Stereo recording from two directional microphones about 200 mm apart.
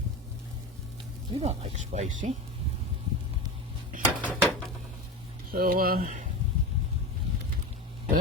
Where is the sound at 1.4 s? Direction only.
30° right (ahead or behind).